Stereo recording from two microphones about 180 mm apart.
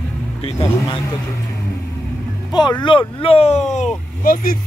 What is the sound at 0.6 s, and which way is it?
Speech, 15° left (ahead or behind).